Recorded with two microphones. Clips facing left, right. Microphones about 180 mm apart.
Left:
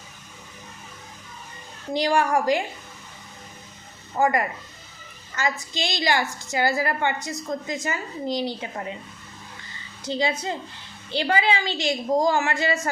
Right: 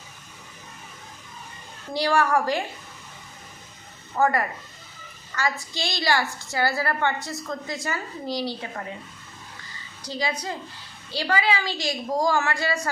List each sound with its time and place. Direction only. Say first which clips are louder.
1.9 s a woman's voice: left 1 dB; 20° left (ahead or behind)
4.2 s a woman's voice: left 1 dB; 15° left (ahead or behind)
10.0 s a woman's voice: left 4 dB; 25° left (ahead or behind)